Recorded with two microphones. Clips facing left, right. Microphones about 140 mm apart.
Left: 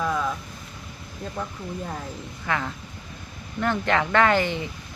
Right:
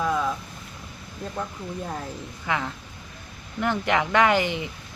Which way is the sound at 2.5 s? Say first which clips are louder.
Even; 15° right (ahead or behind).